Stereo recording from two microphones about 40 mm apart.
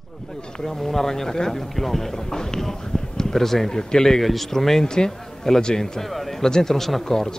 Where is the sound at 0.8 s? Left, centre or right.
Centre.